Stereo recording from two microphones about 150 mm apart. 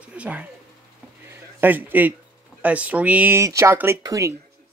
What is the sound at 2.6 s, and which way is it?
Speech, 10° right (ahead or behind).